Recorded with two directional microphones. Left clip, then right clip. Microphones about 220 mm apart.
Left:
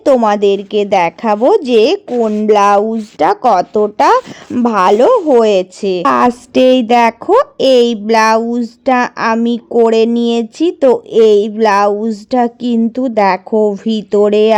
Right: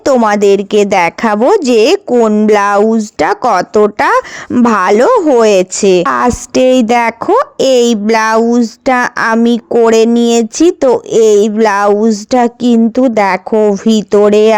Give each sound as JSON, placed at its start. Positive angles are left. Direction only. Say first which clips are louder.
{"t": 0.0, "sound": "speech", "louder": "right 1 dB", "side_deg": -30}